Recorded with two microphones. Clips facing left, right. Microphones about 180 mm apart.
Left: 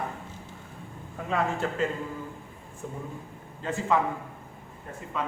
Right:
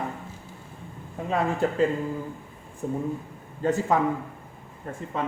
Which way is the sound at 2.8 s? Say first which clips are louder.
Right 9 dB; 40° right (ahead or behind).